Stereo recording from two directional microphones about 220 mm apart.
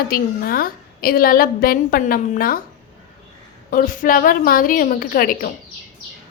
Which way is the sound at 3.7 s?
35° left (ahead or behind).